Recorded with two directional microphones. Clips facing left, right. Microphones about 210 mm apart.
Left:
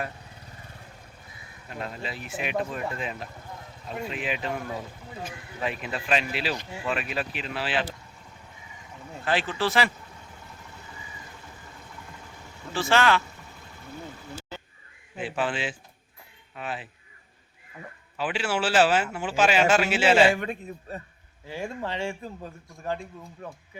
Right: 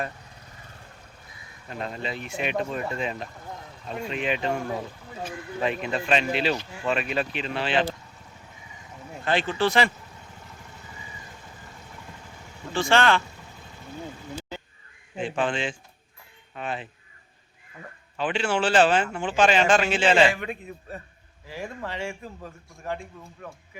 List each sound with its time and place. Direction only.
1.8 s speech: 5° left (ahead or behind)
5.6 s speech: 5° left (ahead or behind)
9.2 s speech: 5° left (ahead or behind)
12.7 s speech: 5° left (ahead or behind)
15.2 s speech: 5° left (ahead or behind)
18.2 s speech: 5° left (ahead or behind)
20.3 s a man's voice: 40° left (ahead or behind)
21.5 s speech: 25° left (ahead or behind)